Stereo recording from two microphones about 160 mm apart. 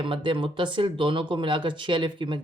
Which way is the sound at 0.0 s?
30° right (ahead or behind).